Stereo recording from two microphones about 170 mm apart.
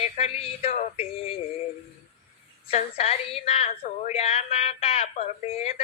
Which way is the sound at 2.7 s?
35° left (ahead or behind).